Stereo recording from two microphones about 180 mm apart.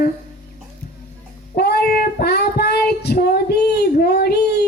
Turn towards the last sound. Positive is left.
turn(degrees=65)  # may be behind; listen again after turning